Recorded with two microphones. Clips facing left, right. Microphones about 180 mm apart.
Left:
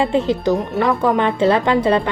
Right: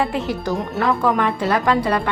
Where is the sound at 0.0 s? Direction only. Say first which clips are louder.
Left 5 dB; 20° left (ahead or behind).